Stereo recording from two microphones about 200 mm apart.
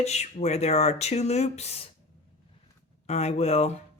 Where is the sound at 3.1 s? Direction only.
35° left (ahead or behind).